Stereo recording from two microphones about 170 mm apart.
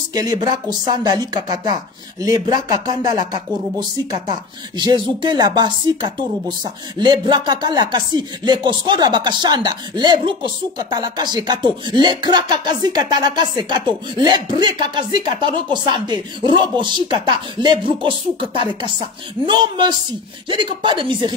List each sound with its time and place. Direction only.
0.1 s speech: 20° right (ahead or behind)